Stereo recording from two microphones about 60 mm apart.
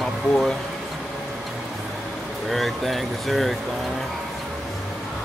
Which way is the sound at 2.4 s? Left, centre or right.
Centre.